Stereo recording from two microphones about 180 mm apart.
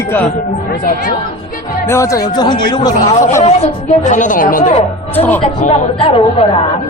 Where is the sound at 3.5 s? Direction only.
40° left (ahead or behind).